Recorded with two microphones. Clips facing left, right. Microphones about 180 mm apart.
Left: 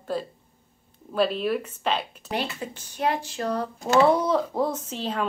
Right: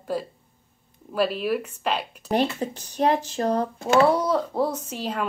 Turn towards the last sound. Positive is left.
turn(degrees=-10)  # may be behind; listen again after turning